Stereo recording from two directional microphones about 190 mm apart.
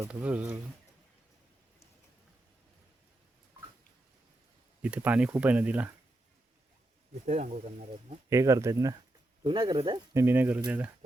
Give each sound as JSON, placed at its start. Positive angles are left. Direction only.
{"t": 0.0, "sound": "speech", "side_deg": -5}
{"t": 4.8, "sound": "speech", "side_deg": -5}
{"t": 7.3, "sound": "speech", "side_deg": -40}
{"t": 8.3, "sound": "speech", "side_deg": -15}
{"t": 10.2, "sound": "speech", "side_deg": -10}